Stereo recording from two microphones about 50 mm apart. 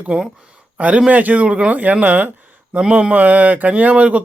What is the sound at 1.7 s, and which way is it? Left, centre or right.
Speech, right.